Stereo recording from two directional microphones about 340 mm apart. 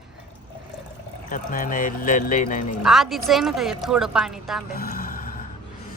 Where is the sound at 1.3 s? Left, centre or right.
Left.